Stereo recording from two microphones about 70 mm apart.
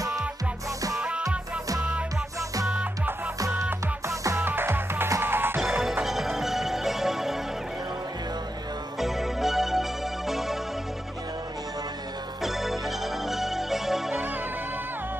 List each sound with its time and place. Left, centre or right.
1.8 s music: centre
3.3 s music: right
4.4 s music: right
5.6 s music: centre
9.0 s music: centre
12.4 s music: centre